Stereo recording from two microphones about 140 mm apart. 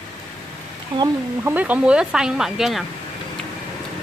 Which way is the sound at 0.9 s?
40° right (ahead or behind).